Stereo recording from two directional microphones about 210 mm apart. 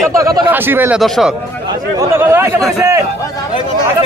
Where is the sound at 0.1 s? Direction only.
15° right (ahead or behind).